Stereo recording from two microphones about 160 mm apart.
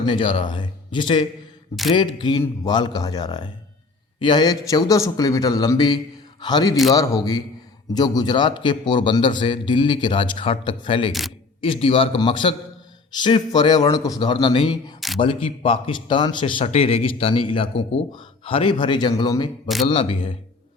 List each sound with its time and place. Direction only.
0.1 s a man's voice: 30° left (ahead or behind)
19.6 s speech: centre (ahead or behind)
19.9 s speech: 35° left (ahead or behind)